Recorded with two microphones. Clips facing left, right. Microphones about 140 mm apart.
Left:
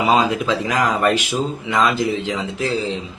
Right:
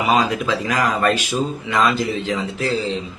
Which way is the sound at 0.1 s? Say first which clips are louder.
Even; 20° left (ahead or behind).